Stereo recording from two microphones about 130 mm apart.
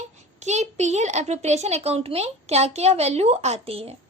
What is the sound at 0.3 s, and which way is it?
A woman's voice, 65° right (ahead or behind).